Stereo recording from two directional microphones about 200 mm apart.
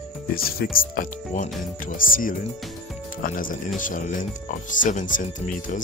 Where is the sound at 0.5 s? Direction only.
45° left (ahead or behind).